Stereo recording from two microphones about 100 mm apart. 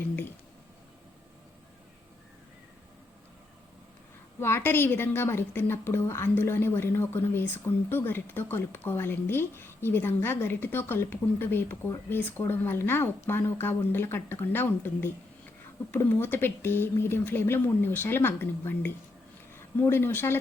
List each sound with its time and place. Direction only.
4.4 s a woman's voice: 25° left (ahead or behind)